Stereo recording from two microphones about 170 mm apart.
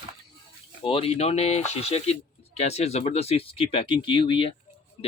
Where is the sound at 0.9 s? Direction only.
35° left (ahead or behind).